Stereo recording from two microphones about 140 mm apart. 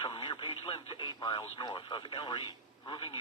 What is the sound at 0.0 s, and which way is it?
Speech, 35° left (ahead or behind).